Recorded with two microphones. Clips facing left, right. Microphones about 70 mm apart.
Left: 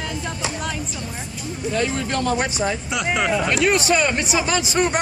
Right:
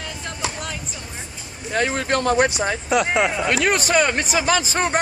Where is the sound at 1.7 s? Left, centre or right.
Right.